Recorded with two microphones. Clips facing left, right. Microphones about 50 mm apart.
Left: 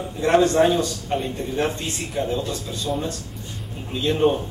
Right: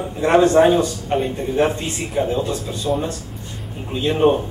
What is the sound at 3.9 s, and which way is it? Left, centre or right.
Speech, centre.